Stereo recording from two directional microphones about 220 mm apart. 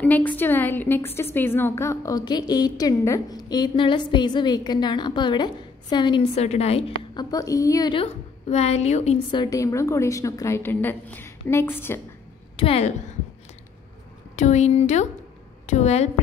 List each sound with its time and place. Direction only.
0.0 s a woman's voice: 5° left (ahead or behind); by 7.2 s 25° left (ahead or behind)
7.2 s a woman's voice: 15° left (ahead or behind)
12.5 s a woman's voice: 25° left (ahead or behind)
14.3 s speech: 30° left (ahead or behind)